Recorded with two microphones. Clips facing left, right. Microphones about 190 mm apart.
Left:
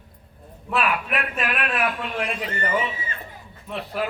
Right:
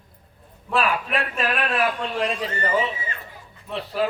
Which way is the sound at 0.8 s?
30° right (ahead or behind).